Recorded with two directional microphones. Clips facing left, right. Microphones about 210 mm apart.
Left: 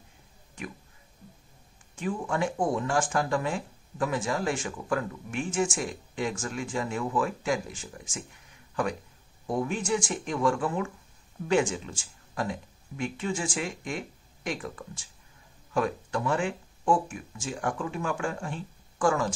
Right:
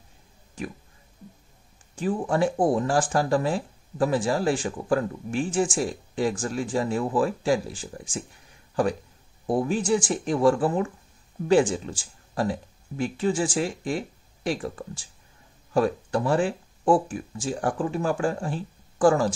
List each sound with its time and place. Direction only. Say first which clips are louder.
2.0 s speech: right 5 dB; 35° right (ahead or behind)
9.5 s speech: right 5 dB; 35° right (ahead or behind)